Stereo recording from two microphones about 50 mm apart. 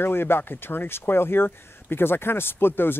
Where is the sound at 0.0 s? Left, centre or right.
Left.